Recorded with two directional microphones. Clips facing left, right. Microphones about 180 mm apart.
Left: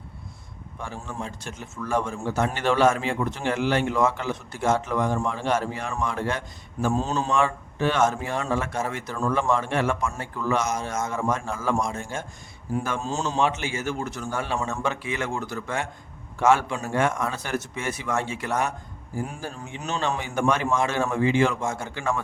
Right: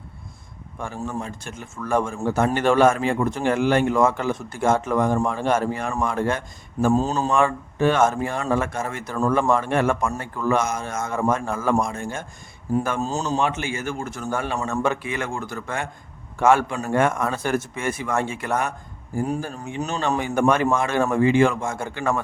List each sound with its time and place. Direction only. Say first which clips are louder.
0.8 s speech: right 5 dB; 50° right (ahead or behind)
6.8 s a man's voice: right 5 dB; 35° right (ahead or behind)
7.3 s a man's voice: right 3 dB; 50° right (ahead or behind)
13.5 s speech: right 1 dB; 55° right (ahead or behind)